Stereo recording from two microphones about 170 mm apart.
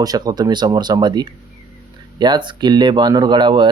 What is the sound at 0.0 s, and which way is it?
Speech, 20° right (ahead or behind).